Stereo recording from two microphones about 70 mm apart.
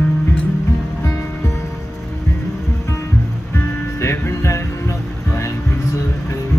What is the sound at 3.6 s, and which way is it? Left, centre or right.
Music, left.